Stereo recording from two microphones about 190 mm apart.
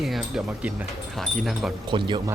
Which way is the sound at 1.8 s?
25° right (ahead or behind).